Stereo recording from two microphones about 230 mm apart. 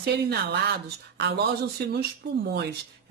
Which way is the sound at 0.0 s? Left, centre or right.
Right.